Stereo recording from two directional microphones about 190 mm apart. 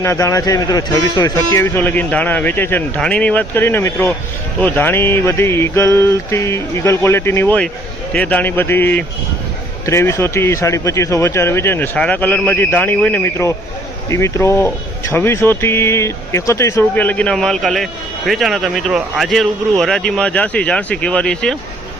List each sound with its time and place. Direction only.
0.0 s speech: 15° left (ahead or behind)